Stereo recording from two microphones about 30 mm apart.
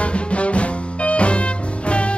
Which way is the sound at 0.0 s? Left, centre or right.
Left.